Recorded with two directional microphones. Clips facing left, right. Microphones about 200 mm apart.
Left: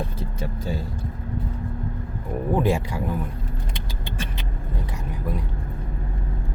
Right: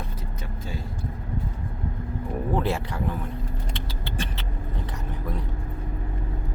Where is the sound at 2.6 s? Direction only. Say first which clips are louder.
Left 7 dB; 15° left (ahead or behind).